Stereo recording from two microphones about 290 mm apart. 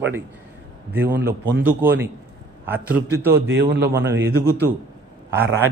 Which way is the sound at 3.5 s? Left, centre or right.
Right.